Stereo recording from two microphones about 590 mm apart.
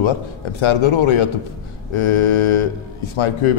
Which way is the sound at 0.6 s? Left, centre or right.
Left.